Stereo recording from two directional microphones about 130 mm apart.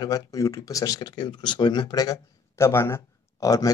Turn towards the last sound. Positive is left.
turn(degrees=25)  # may be behind; listen again after turning